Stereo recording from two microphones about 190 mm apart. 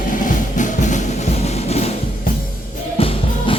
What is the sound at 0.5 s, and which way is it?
Music, 40° left (ahead or behind).